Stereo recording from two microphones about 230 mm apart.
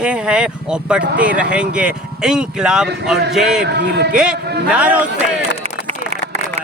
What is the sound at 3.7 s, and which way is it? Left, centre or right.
Speech, right.